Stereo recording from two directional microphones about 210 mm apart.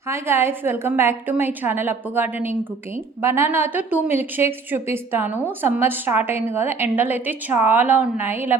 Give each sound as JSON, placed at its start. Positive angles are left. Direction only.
{"t": 0.1, "sound": "a woman's voice", "side_deg": -10}